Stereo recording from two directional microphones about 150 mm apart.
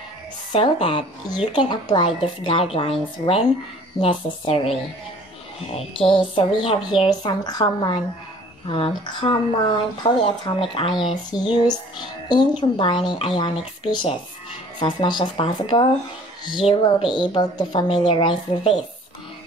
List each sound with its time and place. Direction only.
0.5 s speech: 35° left (ahead or behind)
5.8 s speech: 35° left (ahead or behind)